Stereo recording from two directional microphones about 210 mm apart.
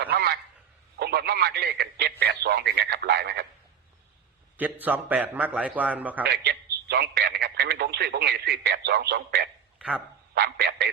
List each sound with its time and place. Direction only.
0.0 s a sound: 50° right (ahead or behind)
0.9 s speech: 50° right (ahead or behind)
4.5 s a man's voice: 10° right (ahead or behind)
6.2 s speech: 50° right (ahead or behind)
9.7 s dog: 5° right (ahead or behind)
10.3 s speech: 50° right (ahead or behind)